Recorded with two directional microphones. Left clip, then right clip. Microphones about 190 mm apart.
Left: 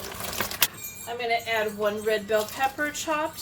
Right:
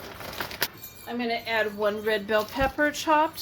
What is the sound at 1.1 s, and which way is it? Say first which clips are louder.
Speech: left 1 dB; 35° right (ahead or behind).